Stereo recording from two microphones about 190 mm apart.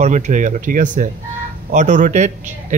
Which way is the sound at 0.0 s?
40° right (ahead or behind).